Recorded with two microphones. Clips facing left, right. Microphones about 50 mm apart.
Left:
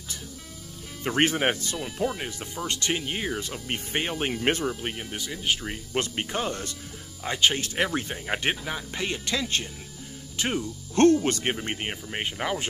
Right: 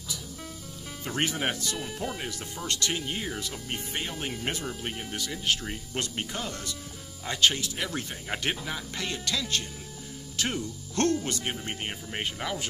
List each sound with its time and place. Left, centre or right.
1.0 s speech: left
2.1 s speech: left
4.6 s speech: centre
5.9 s speech: left
7.2 s speech: centre
7.5 s speech: left
7.9 s speech: left
11.2 s speech: left
11.8 s speech: centre
12.4 s speech: left